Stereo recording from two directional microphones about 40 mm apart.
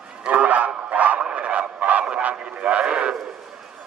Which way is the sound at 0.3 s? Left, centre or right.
Right.